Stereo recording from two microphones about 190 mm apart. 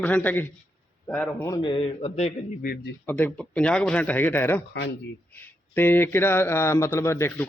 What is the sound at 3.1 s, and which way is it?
Speech, 10° left (ahead or behind).